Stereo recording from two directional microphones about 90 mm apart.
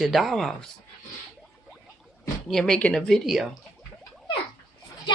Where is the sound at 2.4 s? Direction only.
5° left (ahead or behind).